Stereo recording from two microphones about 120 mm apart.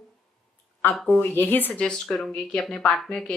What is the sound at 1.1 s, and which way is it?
Speech, 15° left (ahead or behind).